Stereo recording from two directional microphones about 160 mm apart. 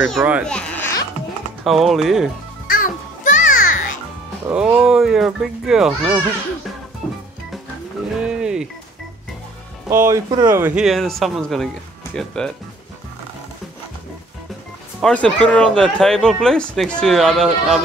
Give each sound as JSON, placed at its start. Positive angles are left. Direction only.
{"t": 0.1, "sound": "speech", "side_deg": -10}
{"t": 0.5, "sound": "speech", "side_deg": 10}
{"t": 1.6, "sound": "speech", "side_deg": 0}
{"t": 2.7, "sound": "music", "side_deg": 55}
{"t": 4.5, "sound": "speech", "side_deg": -10}
{"t": 8.2, "sound": "a sound", "side_deg": -5}
{"t": 9.8, "sound": "speech", "side_deg": -15}
{"t": 15.0, "sound": "speech", "side_deg": 5}